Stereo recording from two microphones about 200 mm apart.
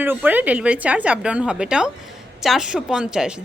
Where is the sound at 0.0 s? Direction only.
10° right (ahead or behind).